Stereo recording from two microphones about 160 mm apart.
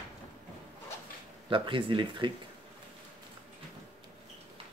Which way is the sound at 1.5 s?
30° right (ahead or behind).